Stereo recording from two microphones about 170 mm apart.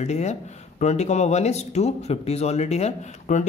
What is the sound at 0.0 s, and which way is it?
A man's voice, 40° left (ahead or behind).